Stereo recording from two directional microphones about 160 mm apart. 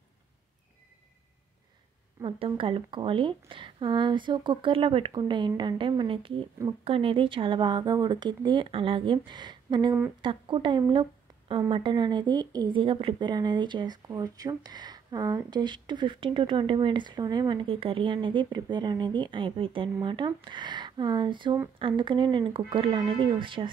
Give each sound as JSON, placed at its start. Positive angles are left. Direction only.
{"t": 2.2, "sound": "a woman's voice", "side_deg": -35}